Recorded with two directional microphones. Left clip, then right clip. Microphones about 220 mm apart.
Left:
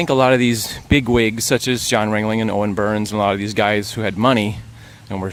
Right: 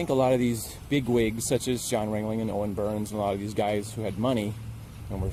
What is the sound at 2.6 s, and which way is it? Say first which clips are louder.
Speech: left 9 dB; 45° left (ahead or behind).